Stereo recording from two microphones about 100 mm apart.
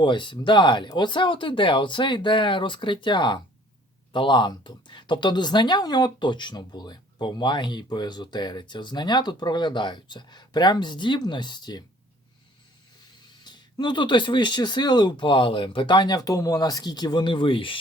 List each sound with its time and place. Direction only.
0.0 s speech: 50° left (ahead or behind)
13.4 s speech: 45° left (ahead or behind)